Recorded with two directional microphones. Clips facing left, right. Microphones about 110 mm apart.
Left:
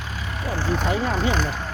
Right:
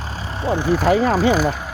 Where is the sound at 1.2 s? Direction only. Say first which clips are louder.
Right 7 dB; 5° right (ahead or behind).